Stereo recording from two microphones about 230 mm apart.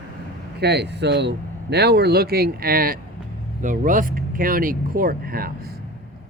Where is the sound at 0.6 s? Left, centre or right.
Right.